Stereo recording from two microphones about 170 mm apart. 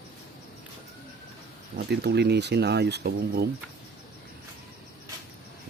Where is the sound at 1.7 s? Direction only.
75° right (ahead or behind).